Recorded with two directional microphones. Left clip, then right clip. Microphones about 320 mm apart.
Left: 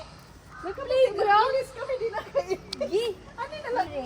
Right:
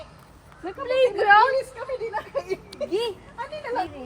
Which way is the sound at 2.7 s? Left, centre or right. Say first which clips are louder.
Left 1 dB; left.